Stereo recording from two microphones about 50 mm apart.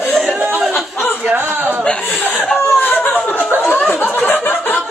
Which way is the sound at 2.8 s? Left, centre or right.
Left.